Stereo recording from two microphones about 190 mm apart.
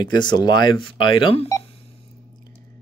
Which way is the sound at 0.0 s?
20° left (ahead or behind).